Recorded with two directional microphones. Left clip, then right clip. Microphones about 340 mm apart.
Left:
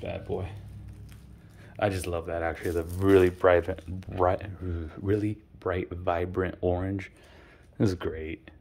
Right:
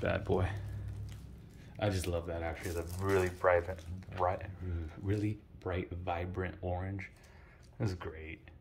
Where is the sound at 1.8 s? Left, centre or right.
Centre.